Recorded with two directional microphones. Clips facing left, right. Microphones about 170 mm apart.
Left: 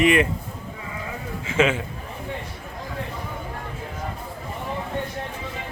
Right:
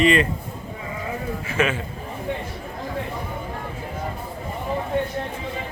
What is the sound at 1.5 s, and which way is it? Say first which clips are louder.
Speech: left 3 dB; 20° left (ahead or behind).